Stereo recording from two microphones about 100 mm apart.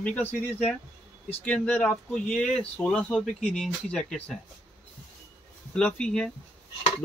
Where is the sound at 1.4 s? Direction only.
15° left (ahead or behind).